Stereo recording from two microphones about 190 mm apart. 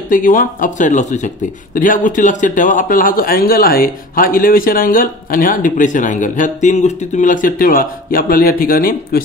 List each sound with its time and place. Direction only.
0.1 s speech: 45° left (ahead or behind)